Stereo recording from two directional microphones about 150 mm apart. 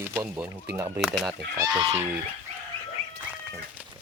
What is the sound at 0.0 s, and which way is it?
Speech, 15° right (ahead or behind).